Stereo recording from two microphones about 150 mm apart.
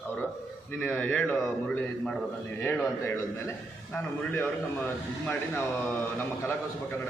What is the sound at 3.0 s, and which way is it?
A man's voice, 15° left (ahead or behind).